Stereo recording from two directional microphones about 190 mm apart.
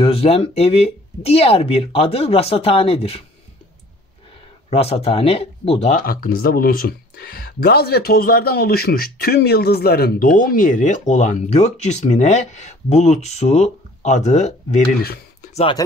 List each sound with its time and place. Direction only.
0.0 s speech: 30° left (ahead or behind)
4.6 s speech: 30° left (ahead or behind)